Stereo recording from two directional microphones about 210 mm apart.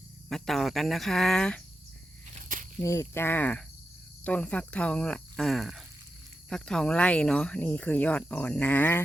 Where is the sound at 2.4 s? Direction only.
40° right (ahead or behind).